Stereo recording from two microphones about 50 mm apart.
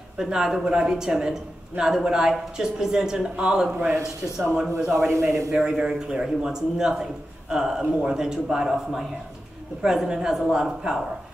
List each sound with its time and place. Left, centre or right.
0.2 s speech: centre
4.9 s a man's voice: right
5.5 s speech: centre